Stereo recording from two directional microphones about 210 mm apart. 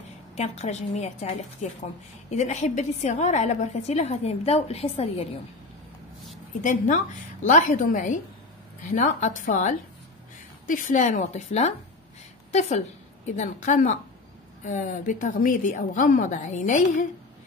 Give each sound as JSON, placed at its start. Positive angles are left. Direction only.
{"t": 0.4, "sound": "a woman's voice", "side_deg": 30}
{"t": 6.6, "sound": "a woman's voice", "side_deg": 35}